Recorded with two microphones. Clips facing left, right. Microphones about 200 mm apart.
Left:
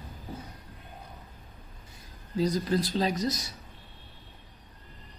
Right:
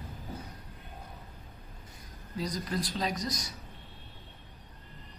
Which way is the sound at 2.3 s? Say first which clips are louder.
Left 7 dB; 30° left (ahead or behind).